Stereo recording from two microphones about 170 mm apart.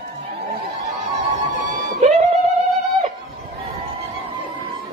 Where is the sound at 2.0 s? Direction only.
40° right (ahead or behind).